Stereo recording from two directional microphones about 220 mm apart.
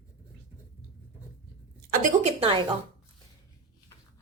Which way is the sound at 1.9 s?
35° right (ahead or behind).